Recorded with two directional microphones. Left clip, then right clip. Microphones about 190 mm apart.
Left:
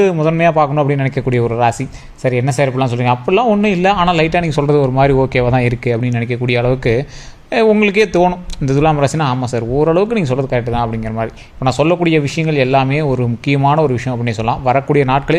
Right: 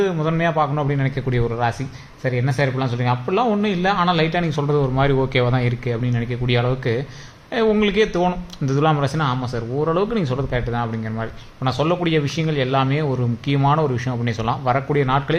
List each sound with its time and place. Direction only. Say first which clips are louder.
0.0 s speech: left 8 dB; 35° left (ahead or behind)